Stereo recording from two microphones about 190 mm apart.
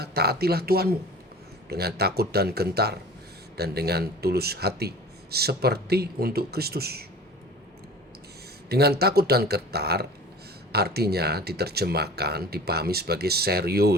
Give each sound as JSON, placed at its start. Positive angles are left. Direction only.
{"t": 0.0, "sound": "speech", "side_deg": -55}
{"t": 8.7, "sound": "speech", "side_deg": -55}